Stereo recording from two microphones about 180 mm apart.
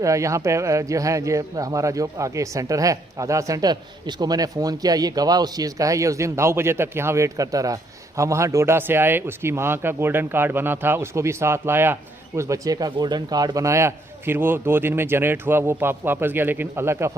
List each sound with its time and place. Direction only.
0.0 s speech: 15° right (ahead or behind)